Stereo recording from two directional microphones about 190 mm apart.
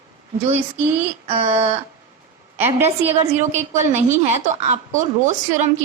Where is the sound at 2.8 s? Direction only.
30° right (ahead or behind).